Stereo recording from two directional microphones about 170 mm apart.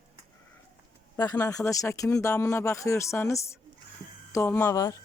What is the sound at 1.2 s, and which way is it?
Speech, 20° left (ahead or behind).